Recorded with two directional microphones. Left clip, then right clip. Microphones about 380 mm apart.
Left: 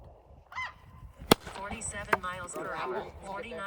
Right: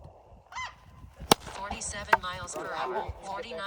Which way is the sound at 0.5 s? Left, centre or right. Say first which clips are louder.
Even; right.